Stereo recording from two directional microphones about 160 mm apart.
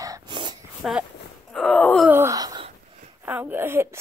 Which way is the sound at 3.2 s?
10° right (ahead or behind).